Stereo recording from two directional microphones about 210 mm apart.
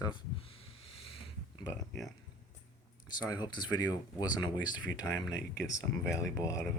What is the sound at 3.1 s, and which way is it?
Speech, 20° left (ahead or behind).